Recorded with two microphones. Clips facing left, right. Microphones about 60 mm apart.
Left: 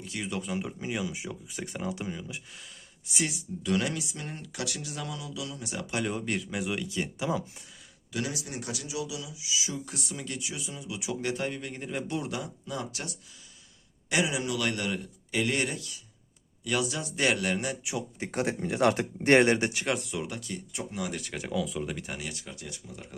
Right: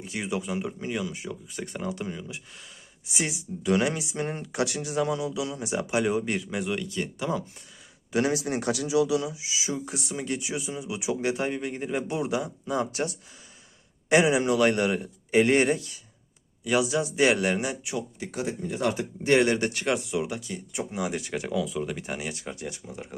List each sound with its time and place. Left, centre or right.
0.0 s speech: right
0.3 s speech: centre
3.1 s speech: centre
8.1 s a man's voice: right
8.4 s a man's voice: right
9.3 s speech: right
12.7 s a man's voice: right
16.6 s speech: centre
18.3 s speech: left
19.4 s speech: left
19.7 s speech: centre
22.2 s speech: right